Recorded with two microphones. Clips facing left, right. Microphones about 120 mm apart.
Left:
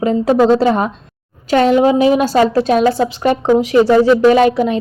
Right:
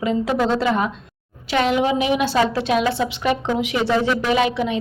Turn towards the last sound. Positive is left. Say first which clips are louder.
# left 9 dB
turn(degrees=40)  # may be behind; listen again after turning